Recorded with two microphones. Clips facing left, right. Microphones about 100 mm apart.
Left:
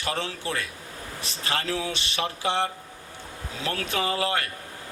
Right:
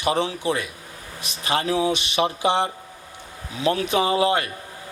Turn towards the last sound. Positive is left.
turn(degrees=-20)  # may be behind; listen again after turning